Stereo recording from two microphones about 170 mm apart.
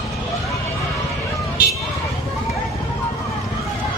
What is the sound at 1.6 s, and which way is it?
Vehicle, 75° left (ahead or behind).